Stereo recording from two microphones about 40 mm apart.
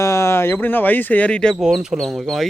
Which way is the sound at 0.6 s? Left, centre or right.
Left.